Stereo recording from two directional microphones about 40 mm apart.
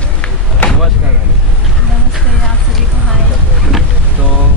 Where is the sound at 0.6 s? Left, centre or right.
Left.